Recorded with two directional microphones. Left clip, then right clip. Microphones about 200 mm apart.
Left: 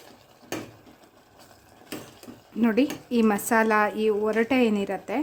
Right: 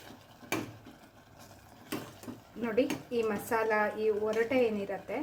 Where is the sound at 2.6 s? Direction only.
45° left (ahead or behind).